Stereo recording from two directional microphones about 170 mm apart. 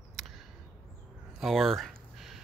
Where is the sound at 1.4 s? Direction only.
Centre (ahead or behind).